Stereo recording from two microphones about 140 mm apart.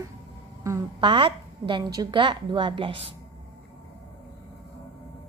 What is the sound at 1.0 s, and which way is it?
A woman's voice, 35° right (ahead or behind).